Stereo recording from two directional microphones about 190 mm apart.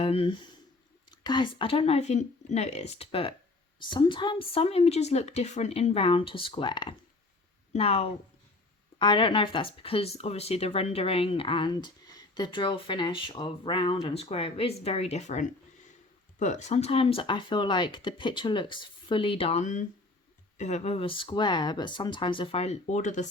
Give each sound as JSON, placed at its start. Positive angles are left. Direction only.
{"t": 0.0, "sound": "speech", "side_deg": 30}